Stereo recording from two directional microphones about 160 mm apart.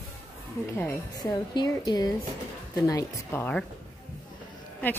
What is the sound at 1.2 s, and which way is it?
Speech, 25° left (ahead or behind).